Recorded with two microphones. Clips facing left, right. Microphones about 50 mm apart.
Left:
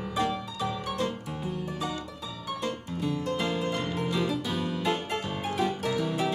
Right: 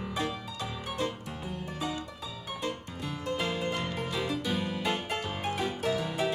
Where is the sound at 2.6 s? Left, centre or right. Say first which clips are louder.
Left 4 dB; centre.